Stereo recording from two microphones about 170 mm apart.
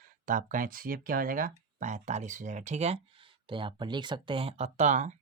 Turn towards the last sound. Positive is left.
turn(degrees=-45)  # may be behind; listen again after turning